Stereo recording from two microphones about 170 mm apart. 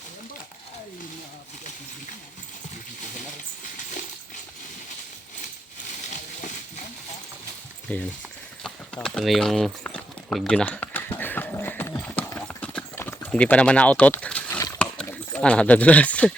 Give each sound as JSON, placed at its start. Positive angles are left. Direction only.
{"t": 3.2, "sound": "coin", "side_deg": 50}
{"t": 7.9, "sound": "speech", "side_deg": 10}
{"t": 8.6, "sound": "clip-clop", "side_deg": 5}